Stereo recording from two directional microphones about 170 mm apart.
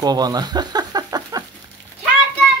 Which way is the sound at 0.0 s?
25° right (ahead or behind).